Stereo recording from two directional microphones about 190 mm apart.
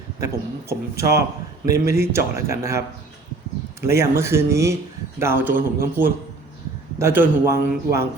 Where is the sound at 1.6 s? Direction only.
15° right (ahead or behind).